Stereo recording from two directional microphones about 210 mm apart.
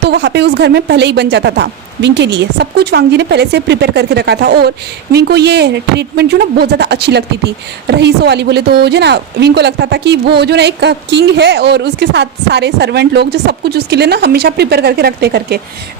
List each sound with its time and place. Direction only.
0.0 s speech: 55° right (ahead or behind)